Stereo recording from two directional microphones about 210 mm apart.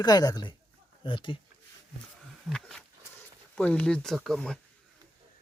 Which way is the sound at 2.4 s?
Centre (ahead or behind).